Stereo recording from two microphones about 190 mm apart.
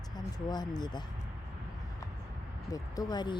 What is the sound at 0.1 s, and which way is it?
Speech, 20° left (ahead or behind).